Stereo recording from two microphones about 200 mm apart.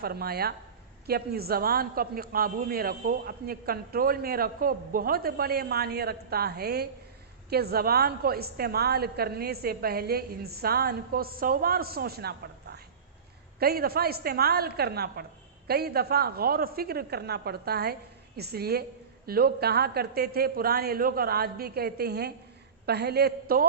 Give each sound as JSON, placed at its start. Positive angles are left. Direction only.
{"t": 0.0, "sound": "a man's voice", "side_deg": -50}